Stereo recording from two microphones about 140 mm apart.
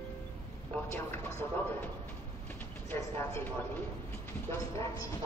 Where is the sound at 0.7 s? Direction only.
15° left (ahead or behind).